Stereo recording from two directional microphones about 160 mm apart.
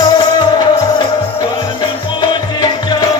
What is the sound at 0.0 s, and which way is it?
Music, 25° left (ahead or behind).